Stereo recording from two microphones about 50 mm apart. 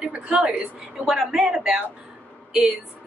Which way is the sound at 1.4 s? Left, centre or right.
Right.